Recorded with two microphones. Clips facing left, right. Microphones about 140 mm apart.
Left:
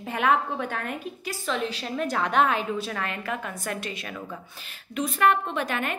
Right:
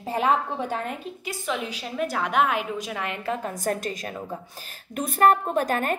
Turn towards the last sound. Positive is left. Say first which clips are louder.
# right 4 dB
turn(degrees=-40)  # may be behind; listen again after turning